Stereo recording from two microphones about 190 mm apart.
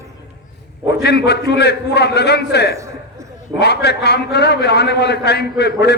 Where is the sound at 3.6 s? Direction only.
60° left (ahead or behind).